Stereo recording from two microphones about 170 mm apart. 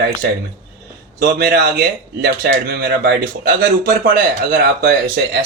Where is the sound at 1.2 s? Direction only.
65° right (ahead or behind).